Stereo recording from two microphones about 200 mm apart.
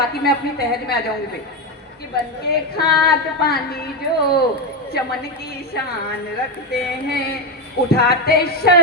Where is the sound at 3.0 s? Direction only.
50° left (ahead or behind).